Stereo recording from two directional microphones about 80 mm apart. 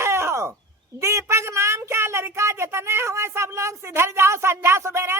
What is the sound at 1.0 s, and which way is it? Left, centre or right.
Speech, right.